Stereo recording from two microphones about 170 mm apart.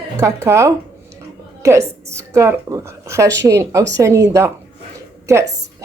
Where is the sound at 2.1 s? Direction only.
15° right (ahead or behind).